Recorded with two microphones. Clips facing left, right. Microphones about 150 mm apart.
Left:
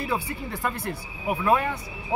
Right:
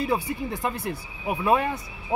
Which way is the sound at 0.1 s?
15° right (ahead or behind).